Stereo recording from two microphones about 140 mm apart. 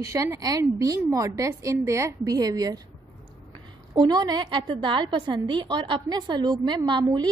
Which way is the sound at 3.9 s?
30° right (ahead or behind).